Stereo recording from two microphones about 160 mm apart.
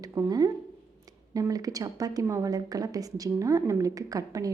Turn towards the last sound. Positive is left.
turn(degrees=-20)  # may be behind; listen again after turning